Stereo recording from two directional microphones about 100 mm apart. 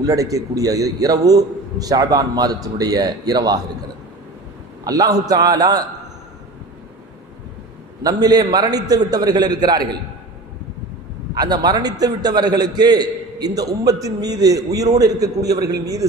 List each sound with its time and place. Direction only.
0.0 s a man's voice: 35° right (ahead or behind)
4.8 s a man's voice: 40° right (ahead or behind)
8.0 s a man's voice: 40° right (ahead or behind)
11.3 s a man's voice: 45° right (ahead or behind)